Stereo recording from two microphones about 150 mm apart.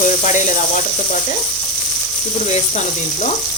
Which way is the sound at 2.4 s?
50° left (ahead or behind).